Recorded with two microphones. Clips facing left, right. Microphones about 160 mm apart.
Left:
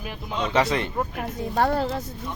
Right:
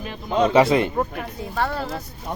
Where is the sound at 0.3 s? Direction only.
45° right (ahead or behind).